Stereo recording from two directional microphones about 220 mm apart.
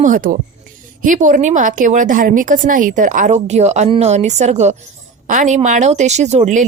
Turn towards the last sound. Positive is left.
turn(degrees=-30)  # may be behind; listen again after turning